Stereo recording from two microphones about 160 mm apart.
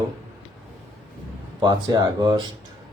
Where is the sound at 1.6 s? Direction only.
25° right (ahead or behind).